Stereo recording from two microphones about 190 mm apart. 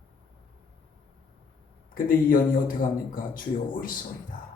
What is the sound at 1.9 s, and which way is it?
Speech, 45° left (ahead or behind).